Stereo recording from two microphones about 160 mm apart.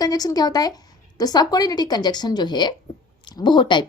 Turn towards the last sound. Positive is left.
turn(degrees=30)  # may be behind; listen again after turning